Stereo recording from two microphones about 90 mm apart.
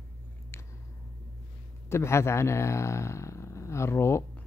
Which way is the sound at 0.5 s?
30° left (ahead or behind).